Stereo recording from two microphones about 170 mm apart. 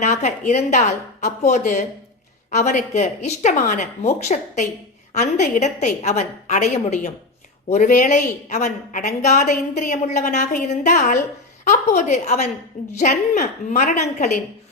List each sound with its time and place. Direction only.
0.0 s speech: 40° left (ahead or behind)